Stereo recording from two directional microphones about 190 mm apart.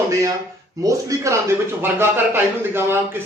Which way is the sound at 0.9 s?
15° right (ahead or behind).